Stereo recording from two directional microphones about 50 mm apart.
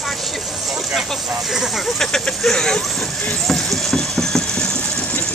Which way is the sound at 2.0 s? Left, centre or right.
Centre.